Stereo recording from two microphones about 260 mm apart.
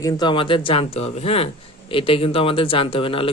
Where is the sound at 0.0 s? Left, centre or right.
Centre.